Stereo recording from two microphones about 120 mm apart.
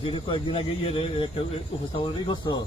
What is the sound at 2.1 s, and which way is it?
Speech, 40° left (ahead or behind).